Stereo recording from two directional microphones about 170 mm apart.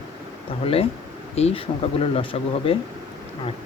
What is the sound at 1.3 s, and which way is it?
Speech, 35° left (ahead or behind).